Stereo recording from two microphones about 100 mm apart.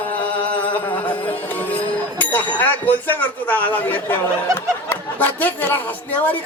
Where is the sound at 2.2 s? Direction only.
15° left (ahead or behind).